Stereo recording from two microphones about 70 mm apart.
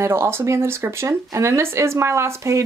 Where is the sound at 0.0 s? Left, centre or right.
Right.